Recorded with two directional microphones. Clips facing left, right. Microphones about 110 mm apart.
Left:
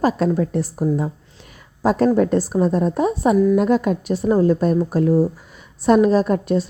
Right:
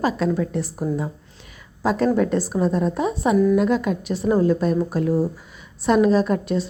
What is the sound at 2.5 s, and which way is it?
Speech, 5° left (ahead or behind).